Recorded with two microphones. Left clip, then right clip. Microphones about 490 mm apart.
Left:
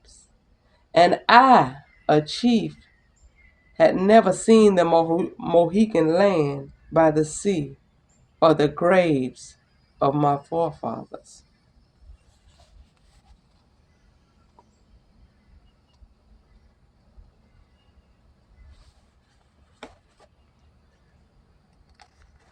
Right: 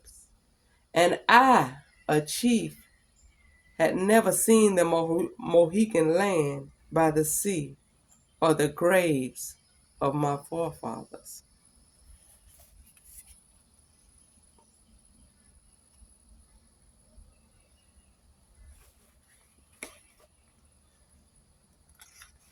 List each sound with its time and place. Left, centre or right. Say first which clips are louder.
0.9 s speech: left 5 dB; right
3.8 s speech: left 7 dB; right